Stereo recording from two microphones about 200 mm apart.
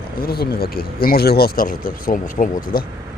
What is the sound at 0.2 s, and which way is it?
Speech, 50° left (ahead or behind).